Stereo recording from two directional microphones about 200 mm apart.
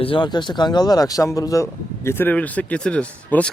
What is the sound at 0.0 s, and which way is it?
Speech, 25° left (ahead or behind).